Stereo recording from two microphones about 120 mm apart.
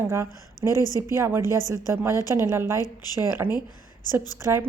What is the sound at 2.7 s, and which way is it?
Speech, 30° left (ahead or behind).